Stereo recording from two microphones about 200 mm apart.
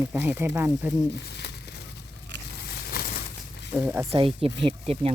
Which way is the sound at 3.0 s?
50° left (ahead or behind).